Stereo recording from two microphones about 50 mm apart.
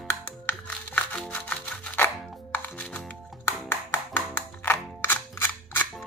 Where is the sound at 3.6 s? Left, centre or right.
Left.